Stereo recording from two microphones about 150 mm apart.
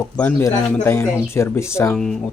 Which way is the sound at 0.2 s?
15° left (ahead or behind).